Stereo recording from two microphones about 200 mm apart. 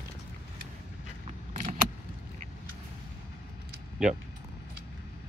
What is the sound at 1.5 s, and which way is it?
Vehicle, 35° right (ahead or behind).